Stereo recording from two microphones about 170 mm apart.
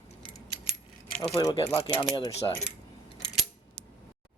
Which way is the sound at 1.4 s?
25° left (ahead or behind).